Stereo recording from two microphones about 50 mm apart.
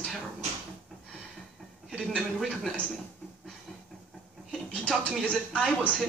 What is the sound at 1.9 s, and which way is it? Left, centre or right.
Speech, centre.